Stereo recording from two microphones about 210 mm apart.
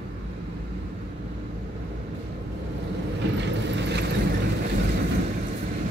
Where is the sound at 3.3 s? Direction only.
55° right (ahead or behind).